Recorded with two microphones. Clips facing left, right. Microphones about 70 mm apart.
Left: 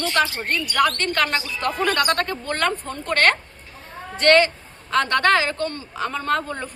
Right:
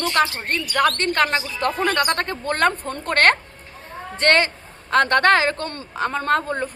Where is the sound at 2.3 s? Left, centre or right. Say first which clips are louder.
Right 3 dB; right.